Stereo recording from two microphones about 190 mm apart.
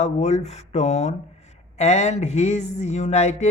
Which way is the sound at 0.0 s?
35° left (ahead or behind).